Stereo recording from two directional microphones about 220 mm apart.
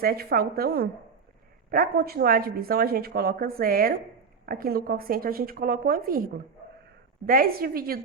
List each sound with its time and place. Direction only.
0.0 s speech: 45° right (ahead or behind)